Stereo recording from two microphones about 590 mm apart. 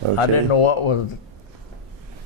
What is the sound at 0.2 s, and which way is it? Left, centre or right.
Speech, left.